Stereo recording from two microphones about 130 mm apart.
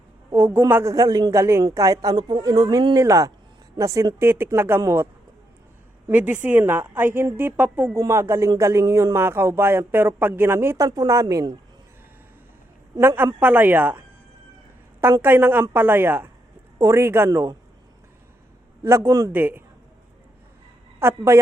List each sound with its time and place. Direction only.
0.3 s a woman's voice: 20° right (ahead or behind)
6.1 s a woman's voice: 10° right (ahead or behind)
13.0 s a woman's voice: 15° right (ahead or behind)
15.0 s a woman's voice: 20° right (ahead or behind)
18.8 s a woman's voice: 20° right (ahead or behind)
21.0 s a woman's voice: 20° right (ahead or behind)